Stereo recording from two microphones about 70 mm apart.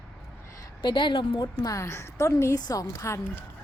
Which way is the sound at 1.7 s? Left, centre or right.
Left.